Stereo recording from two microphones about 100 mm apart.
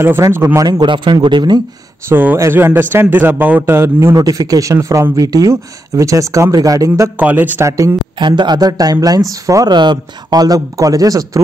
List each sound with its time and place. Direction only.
0.0 s speech: 25° right (ahead or behind)
0.6 s a man's voice: 45° right (ahead or behind)
2.0 s speech: 25° right (ahead or behind)
7.2 s speech: 15° right (ahead or behind)
7.6 s speech: 30° right (ahead or behind)
8.2 s a man's voice: 50° right (ahead or behind)